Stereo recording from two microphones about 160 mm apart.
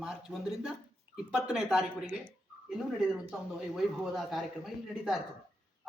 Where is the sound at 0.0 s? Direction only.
Centre (ahead or behind).